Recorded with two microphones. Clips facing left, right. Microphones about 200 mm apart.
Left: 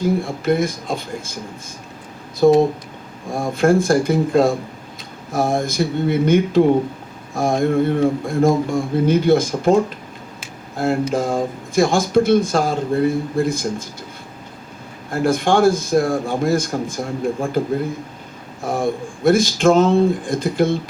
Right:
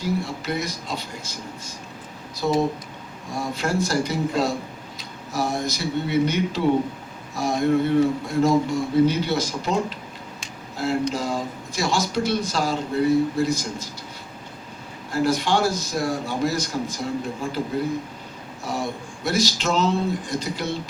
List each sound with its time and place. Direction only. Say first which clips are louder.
0.0 s speech: left 7 dB; 50° left (ahead or behind)
2.4 s speech: left 9 dB; 50° left (ahead or behind)
10.8 s speech: left 5 dB; 50° left (ahead or behind)
15.1 s speech: left 5 dB; 50° left (ahead or behind)
18.6 s speech: left 7 dB; 50° left (ahead or behind)